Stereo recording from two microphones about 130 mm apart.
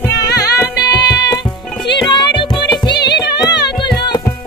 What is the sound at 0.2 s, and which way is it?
Music, 30° left (ahead or behind).